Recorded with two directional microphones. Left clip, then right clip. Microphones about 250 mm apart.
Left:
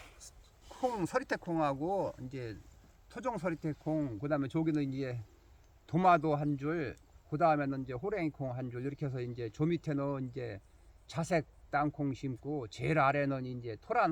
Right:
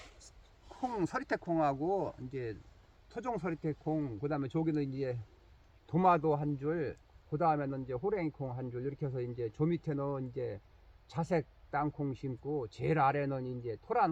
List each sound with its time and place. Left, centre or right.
0.2 s speech: centre; by 14.1 s left